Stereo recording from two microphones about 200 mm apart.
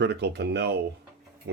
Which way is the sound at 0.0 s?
55° right (ahead or behind).